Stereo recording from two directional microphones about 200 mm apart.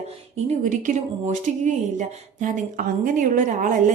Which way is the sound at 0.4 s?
40° right (ahead or behind).